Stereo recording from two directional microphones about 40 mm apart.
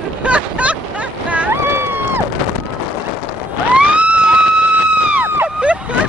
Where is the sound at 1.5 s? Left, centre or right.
Right.